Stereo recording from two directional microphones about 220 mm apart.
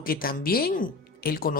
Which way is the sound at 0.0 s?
40° left (ahead or behind).